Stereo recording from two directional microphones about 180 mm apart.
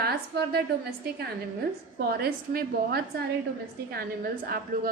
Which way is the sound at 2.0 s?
60° right (ahead or behind).